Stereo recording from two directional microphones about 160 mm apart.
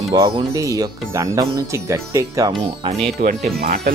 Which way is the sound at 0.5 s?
20° right (ahead or behind).